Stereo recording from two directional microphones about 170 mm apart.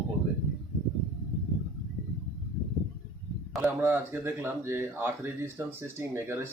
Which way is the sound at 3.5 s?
15° right (ahead or behind).